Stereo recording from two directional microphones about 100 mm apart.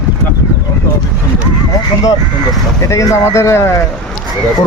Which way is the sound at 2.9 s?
30° left (ahead or behind).